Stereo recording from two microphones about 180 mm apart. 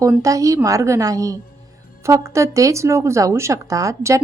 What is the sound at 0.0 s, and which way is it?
A woman's voice, 15° right (ahead or behind).